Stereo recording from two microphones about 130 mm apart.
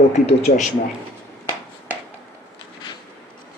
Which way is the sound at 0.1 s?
55° left (ahead or behind).